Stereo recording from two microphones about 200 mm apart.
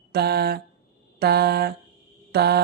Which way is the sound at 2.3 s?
55° right (ahead or behind).